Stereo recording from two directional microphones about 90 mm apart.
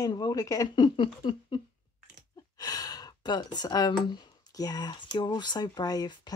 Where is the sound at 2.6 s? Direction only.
45° left (ahead or behind).